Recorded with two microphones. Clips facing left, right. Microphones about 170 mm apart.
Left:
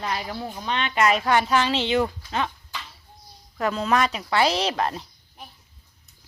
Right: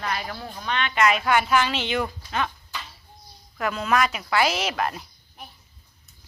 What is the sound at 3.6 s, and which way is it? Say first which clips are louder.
Speech: left 1 dB; 35° left (ahead or behind).